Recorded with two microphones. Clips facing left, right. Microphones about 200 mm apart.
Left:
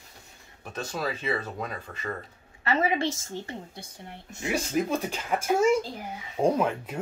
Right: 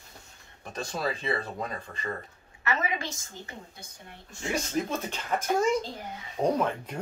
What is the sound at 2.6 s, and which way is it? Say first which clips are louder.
A woman's voice: left 5 dB; 30° left (ahead or behind).